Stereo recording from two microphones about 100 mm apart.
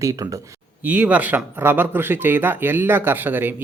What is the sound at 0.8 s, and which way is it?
Speech, 15° right (ahead or behind).